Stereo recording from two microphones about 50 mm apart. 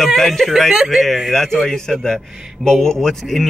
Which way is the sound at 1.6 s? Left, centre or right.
Centre.